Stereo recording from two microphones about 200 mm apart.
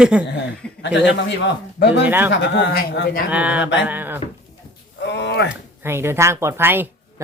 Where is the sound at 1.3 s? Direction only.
60° left (ahead or behind).